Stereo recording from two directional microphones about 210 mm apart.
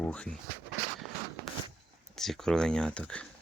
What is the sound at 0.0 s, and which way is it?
Speech, 5° left (ahead or behind).